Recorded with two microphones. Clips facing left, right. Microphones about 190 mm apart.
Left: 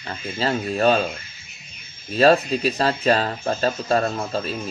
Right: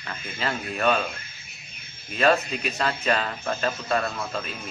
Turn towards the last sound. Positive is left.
turn(degrees=35)  # may be behind; listen again after turning